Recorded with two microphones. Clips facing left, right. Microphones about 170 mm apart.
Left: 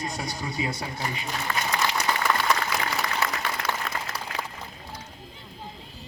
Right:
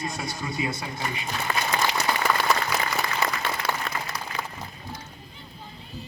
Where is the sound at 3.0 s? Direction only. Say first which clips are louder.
Right 1 dB; 30° right (ahead or behind).